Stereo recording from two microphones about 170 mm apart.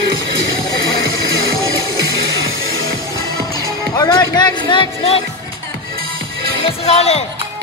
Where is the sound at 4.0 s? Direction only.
20° left (ahead or behind).